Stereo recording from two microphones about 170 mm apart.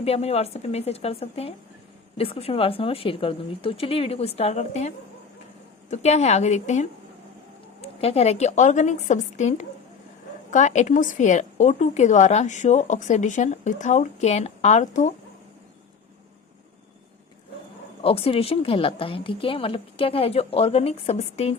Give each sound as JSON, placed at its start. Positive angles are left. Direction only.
{"t": 0.0, "sound": "a woman's voice", "side_deg": 35}
{"t": 18.0, "sound": "a woman's voice", "side_deg": 35}